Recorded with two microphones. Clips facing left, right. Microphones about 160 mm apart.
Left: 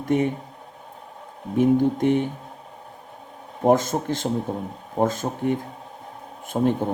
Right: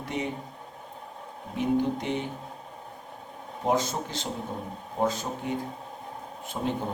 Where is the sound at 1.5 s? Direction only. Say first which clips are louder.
Left 7 dB; 50° left (ahead or behind).